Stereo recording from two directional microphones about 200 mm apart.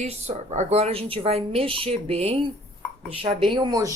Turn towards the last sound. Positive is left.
turn(degrees=-20)  # may be behind; listen again after turning